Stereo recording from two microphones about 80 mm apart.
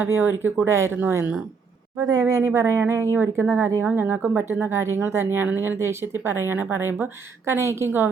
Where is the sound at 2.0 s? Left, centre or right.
Right.